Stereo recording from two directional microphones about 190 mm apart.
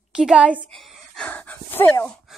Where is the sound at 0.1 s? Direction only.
5° right (ahead or behind).